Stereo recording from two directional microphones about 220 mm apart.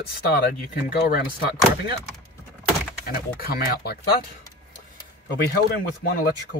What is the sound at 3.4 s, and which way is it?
Speech, 45° left (ahead or behind).